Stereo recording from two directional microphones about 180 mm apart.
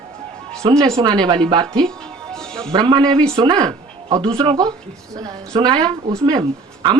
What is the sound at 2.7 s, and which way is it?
A woman's voice, 25° right (ahead or behind).